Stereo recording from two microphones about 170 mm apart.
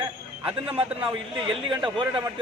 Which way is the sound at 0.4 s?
30° right (ahead or behind).